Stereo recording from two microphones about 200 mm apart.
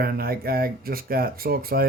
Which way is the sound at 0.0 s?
50° right (ahead or behind).